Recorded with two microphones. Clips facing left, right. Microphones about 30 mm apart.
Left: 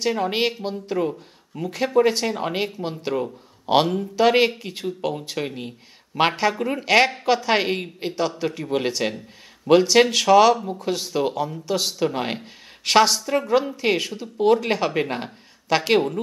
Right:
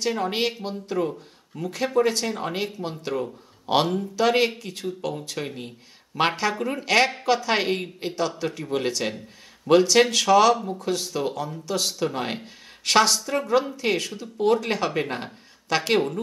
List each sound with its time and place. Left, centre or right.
0.0 s speech: centre